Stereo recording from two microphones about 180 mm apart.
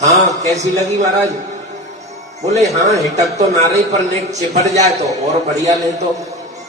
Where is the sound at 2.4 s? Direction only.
40° right (ahead or behind).